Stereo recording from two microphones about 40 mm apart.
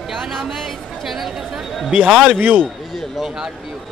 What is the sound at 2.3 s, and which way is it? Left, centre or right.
Speech, right.